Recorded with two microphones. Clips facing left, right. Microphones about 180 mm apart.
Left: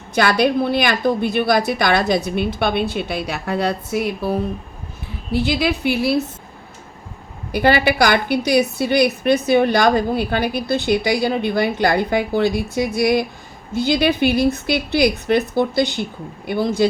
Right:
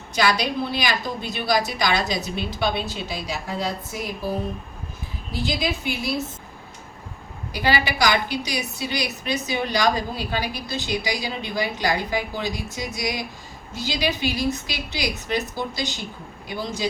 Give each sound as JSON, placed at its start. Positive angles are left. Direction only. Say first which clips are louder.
{"t": 0.1, "sound": "a woman's voice", "louder": "left 6 dB", "side_deg": 55}
{"t": 5.3, "sound": "a woman's voice", "louder": "left 7 dB", "side_deg": 65}
{"t": 7.5, "sound": "a woman's voice", "louder": "left 7 dB", "side_deg": 55}